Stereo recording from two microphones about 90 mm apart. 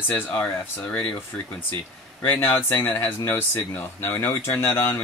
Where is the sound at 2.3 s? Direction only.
20° left (ahead or behind).